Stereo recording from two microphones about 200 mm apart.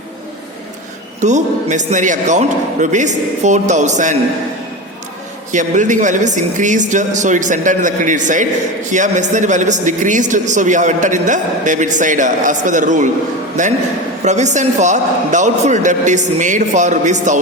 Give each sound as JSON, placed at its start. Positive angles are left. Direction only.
{"t": 1.2, "sound": "a man's voice", "side_deg": -35}
{"t": 5.5, "sound": "a man's voice", "side_deg": -40}